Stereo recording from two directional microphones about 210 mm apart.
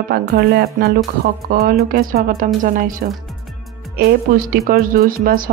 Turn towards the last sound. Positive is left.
turn(degrees=-45)  # may be behind; listen again after turning